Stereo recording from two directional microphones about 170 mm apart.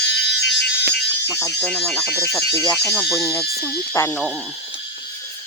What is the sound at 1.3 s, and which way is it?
Speech, 20° left (ahead or behind).